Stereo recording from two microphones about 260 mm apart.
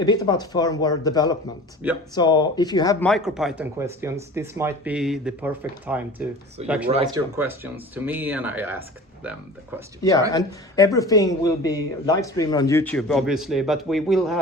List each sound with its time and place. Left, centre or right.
0.0 s speech: centre
3.1 s speech: centre
6.6 s speech: right
7.1 s speech: centre
10.3 s speech: centre